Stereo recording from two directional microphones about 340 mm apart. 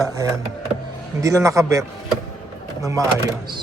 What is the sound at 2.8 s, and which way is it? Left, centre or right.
Speech, centre.